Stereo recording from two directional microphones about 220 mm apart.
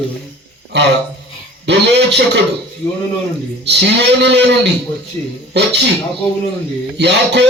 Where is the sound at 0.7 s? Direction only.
50° right (ahead or behind).